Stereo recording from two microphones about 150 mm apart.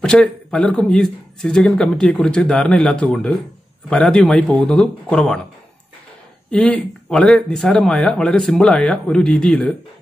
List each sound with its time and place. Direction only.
0.0 s a man's voice: 5° left (ahead or behind)
6.5 s a man's voice: 10° left (ahead or behind)